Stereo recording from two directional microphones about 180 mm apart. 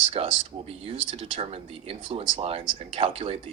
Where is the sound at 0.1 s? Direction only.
35° right (ahead or behind).